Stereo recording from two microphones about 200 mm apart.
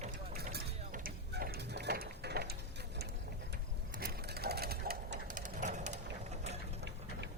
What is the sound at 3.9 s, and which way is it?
Sewing machine, 50° right (ahead or behind).